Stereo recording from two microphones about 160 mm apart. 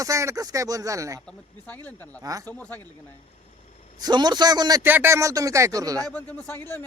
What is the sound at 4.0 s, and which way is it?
Speech, 25° right (ahead or behind).